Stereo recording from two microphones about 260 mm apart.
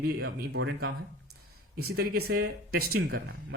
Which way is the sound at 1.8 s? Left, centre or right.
Right.